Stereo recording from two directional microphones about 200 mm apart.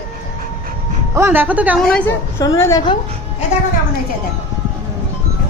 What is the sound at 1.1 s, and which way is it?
Speech, 10° right (ahead or behind).